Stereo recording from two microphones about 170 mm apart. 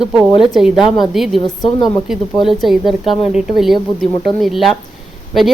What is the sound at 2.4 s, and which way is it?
Speech, centre (ahead or behind).